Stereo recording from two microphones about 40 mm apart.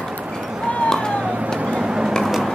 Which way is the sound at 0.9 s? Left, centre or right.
Centre.